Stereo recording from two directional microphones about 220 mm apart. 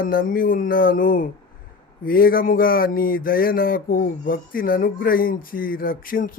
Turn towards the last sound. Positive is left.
turn(degrees=40)  # may be behind; listen again after turning